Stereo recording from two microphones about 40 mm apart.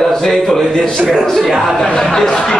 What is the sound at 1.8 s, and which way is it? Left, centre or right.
Speech, left.